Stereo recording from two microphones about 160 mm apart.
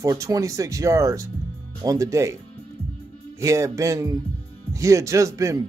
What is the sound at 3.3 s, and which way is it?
Speech, 20° right (ahead or behind).